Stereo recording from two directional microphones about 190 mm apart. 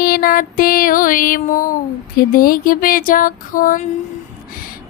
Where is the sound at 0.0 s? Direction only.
45° left (ahead or behind).